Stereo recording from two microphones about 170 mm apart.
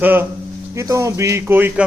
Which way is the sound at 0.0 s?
10° right (ahead or behind).